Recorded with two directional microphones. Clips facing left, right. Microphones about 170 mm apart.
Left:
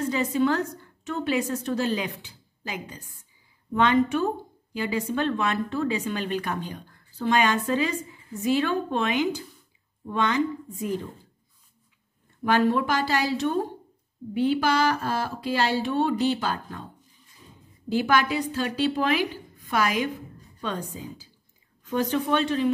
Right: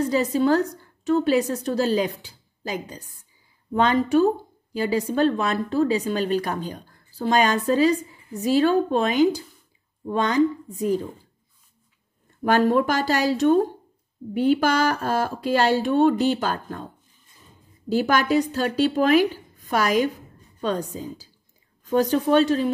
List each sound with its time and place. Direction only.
0.0 s a woman's voice: 35° right (ahead or behind)
12.4 s speech: 45° right (ahead or behind)
17.8 s a woman's voice: 40° right (ahead or behind)